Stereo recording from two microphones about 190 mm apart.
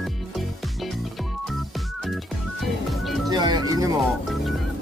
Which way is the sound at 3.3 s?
20° right (ahead or behind).